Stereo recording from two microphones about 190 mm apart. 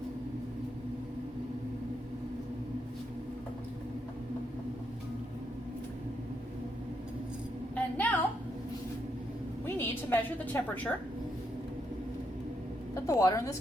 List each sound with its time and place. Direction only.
7.9 s a sound: 10° left (ahead or behind)
9.6 s a woman's voice: 10° left (ahead or behind)
13.1 s a woman's voice: 15° left (ahead or behind)